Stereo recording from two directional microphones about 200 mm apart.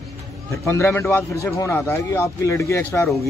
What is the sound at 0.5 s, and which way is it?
A man's voice, 10° left (ahead or behind).